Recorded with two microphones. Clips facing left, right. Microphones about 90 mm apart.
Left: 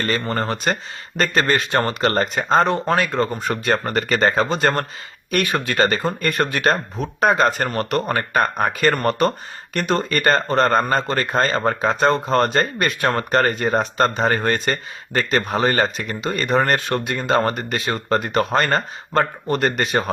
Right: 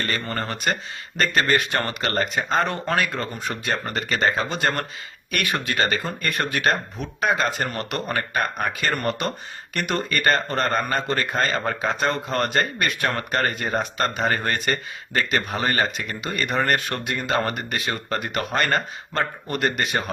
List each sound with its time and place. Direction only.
0.1 s speech: 30° left (ahead or behind)
2.7 s speech: 20° left (ahead or behind)
3.2 s speech: 40° left (ahead or behind)